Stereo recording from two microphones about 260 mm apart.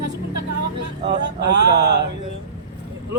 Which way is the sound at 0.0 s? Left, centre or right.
Right.